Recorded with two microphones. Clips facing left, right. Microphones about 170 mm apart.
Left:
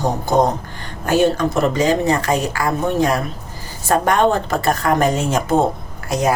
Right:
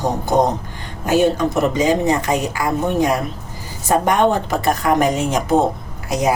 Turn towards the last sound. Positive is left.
turn(degrees=-15)  # may be behind; listen again after turning